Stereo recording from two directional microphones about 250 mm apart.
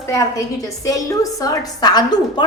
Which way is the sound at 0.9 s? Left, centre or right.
Centre.